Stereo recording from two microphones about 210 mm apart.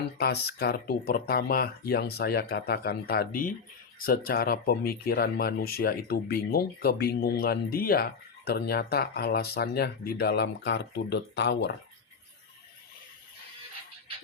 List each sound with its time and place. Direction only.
0.2 s speech: 50° left (ahead or behind)